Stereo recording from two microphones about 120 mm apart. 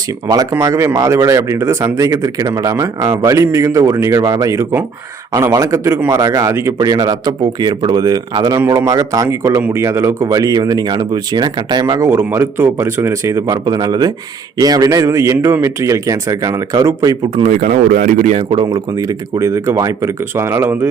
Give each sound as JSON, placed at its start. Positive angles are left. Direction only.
{"t": 0.6, "sound": "speech", "side_deg": -25}
{"t": 17.3, "sound": "speech", "side_deg": -80}
{"t": 18.3, "sound": "speech", "side_deg": -45}
{"t": 18.9, "sound": "speech", "side_deg": -30}